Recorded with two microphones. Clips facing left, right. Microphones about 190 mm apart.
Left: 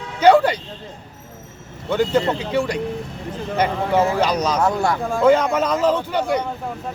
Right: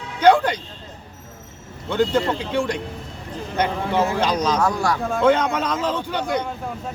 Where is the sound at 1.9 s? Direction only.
10° left (ahead or behind).